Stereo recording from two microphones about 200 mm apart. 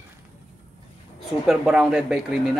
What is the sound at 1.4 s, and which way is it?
Speech, 5° right (ahead or behind).